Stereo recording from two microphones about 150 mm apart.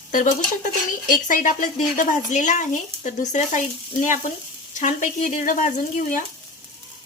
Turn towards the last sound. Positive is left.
turn(degrees=55)  # may be behind; listen again after turning